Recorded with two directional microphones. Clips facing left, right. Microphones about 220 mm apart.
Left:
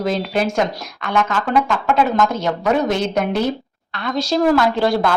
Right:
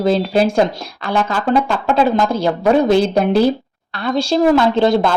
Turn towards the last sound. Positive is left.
turn(degrees=-25)  # may be behind; listen again after turning